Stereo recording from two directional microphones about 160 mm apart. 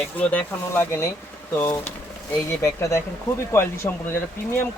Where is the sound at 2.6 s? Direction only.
20° left (ahead or behind).